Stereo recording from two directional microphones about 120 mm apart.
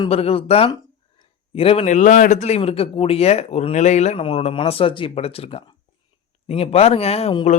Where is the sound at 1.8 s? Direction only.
90° left; by 4.2 s 70° left (ahead or behind).